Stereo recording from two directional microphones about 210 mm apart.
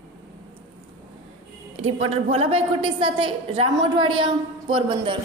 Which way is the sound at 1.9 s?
30° right (ahead or behind).